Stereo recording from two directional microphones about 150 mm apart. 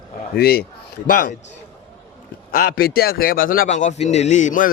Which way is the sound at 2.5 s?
90° left.